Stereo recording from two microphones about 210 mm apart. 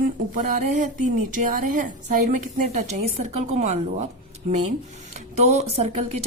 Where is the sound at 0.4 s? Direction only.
35° right (ahead or behind).